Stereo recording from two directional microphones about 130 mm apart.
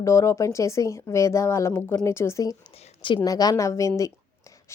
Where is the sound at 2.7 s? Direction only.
45° left (ahead or behind).